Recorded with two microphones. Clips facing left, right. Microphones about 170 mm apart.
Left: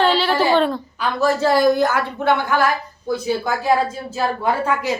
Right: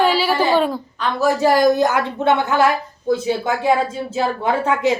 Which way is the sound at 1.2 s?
15° right (ahead or behind).